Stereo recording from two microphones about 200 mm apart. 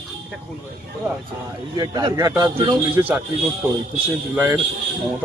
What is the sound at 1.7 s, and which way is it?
A man's voice, 20° right (ahead or behind).